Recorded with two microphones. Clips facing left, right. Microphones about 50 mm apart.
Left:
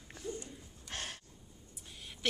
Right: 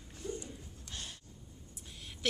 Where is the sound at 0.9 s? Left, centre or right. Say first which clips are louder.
Left 4 dB; left.